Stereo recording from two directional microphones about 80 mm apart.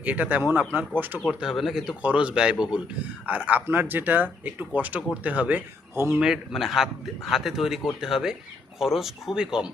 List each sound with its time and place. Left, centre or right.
0.0 s speech: centre
1.3 s a man's voice: centre
2.0 s speech: centre
6.1 s a man's voice: centre